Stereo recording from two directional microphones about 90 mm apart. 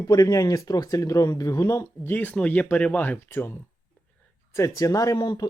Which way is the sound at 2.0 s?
20° left (ahead or behind).